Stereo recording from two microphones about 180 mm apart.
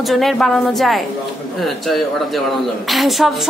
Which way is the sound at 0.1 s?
Centre (ahead or behind).